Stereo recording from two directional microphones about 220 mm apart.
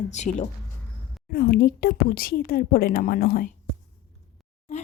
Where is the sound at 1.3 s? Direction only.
45° left (ahead or behind).